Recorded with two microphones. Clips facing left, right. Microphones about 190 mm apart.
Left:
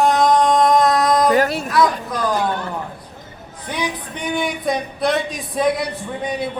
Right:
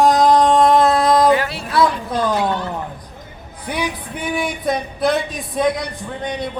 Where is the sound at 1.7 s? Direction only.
30° right (ahead or behind).